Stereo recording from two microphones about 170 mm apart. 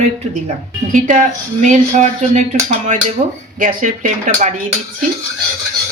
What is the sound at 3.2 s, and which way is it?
Speech, 40° right (ahead or behind).